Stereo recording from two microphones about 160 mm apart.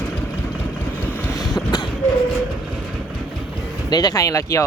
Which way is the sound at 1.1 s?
15° left (ahead or behind).